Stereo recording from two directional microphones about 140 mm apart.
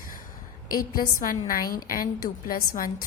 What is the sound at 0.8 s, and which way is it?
A woman's voice, 85° left.